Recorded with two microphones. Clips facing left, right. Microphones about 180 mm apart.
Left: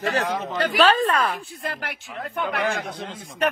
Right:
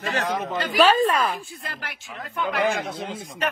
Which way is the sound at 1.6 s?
60° left (ahead or behind).